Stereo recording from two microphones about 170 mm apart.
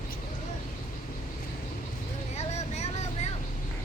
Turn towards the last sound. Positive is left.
turn(degrees=40)  # may be behind; listen again after turning